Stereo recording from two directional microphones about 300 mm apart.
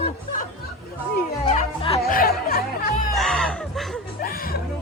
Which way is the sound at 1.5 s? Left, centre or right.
Left.